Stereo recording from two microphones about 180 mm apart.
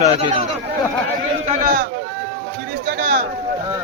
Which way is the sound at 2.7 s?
60° right (ahead or behind).